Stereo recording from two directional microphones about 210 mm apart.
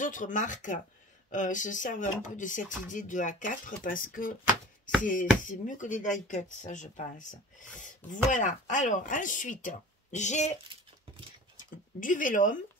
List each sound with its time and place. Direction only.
0.0 s speech: 40° left (ahead or behind)
5.4 s speech: 40° left (ahead or behind)